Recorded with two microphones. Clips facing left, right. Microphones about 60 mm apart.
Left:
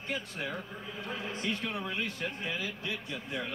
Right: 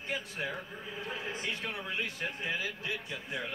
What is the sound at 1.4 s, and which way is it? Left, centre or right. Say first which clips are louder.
Speech: left 3 dB; left.